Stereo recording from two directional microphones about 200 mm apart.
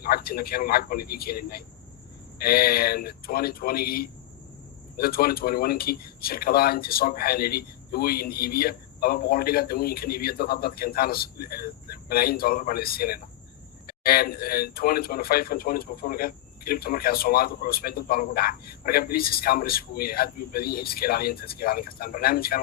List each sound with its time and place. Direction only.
0.0 s speech: 50° left (ahead or behind)